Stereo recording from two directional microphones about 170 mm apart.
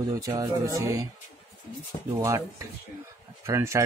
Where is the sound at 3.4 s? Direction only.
15° right (ahead or behind).